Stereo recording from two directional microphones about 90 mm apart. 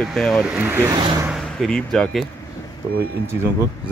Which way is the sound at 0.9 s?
45° right (ahead or behind).